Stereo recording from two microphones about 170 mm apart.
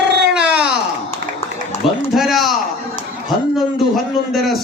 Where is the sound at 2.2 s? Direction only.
Centre (ahead or behind).